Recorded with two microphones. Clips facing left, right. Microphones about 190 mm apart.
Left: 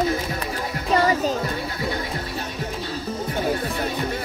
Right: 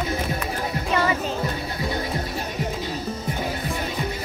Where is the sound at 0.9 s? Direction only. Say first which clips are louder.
Left 5 dB; 40° left (ahead or behind).